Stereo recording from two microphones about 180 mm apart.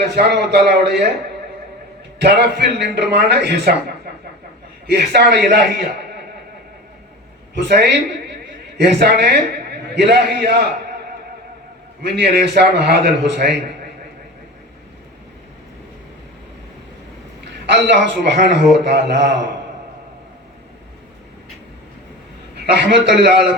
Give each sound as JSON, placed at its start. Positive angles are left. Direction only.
{"t": 0.1, "sound": "a man's voice", "side_deg": -65}
{"t": 2.2, "sound": "a man's voice", "side_deg": -70}
{"t": 4.9, "sound": "a man's voice", "side_deg": -65}
{"t": 7.6, "sound": "a man's voice", "side_deg": -70}
{"t": 12.0, "sound": "a man's voice", "side_deg": -65}
{"t": 17.4, "sound": "a man's voice", "side_deg": -75}
{"t": 22.6, "sound": "a man's voice", "side_deg": -70}